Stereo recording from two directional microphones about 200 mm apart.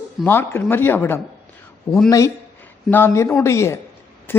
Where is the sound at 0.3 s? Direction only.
10° left (ahead or behind).